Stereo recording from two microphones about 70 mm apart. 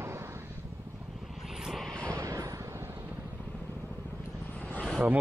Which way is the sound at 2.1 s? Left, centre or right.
Right.